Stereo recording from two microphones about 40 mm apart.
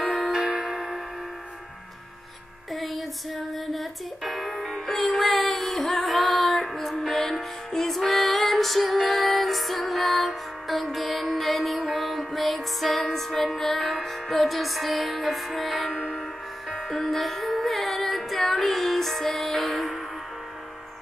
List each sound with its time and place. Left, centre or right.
0.1 s music: right
2.7 s music: centre